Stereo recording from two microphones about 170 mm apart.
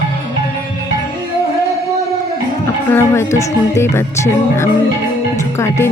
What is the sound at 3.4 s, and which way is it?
Speech, 15° left (ahead or behind).